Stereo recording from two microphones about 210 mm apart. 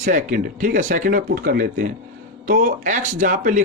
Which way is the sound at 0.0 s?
40° right (ahead or behind).